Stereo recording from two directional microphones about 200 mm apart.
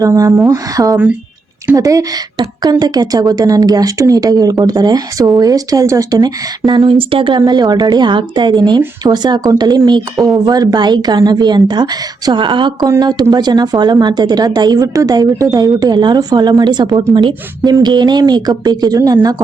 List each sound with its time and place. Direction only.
0.0 s a woman's voice: 15° right (ahead or behind)